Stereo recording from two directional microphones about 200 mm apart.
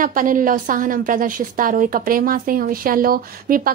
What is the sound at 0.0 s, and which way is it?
A woman's voice, 40° right (ahead or behind).